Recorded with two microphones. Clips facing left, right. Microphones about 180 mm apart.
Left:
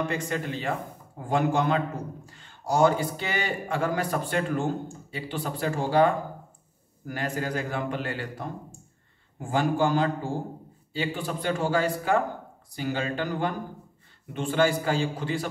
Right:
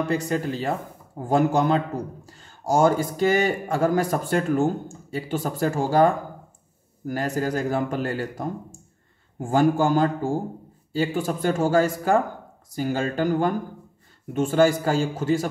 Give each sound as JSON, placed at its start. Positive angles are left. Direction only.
{"t": 0.1, "sound": "speech", "side_deg": -35}